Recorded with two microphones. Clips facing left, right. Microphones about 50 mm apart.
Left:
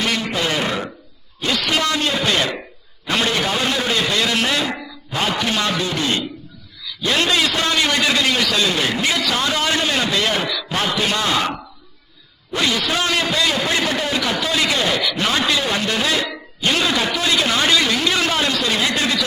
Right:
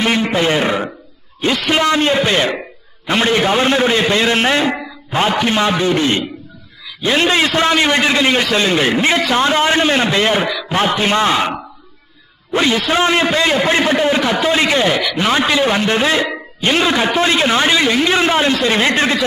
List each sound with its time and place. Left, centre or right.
0.0 s a man's voice: right
4.7 s a sound: right
5.4 s a man's voice: right
12.5 s a man's voice: right